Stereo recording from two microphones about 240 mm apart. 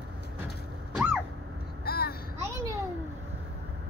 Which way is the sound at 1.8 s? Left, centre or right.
Left.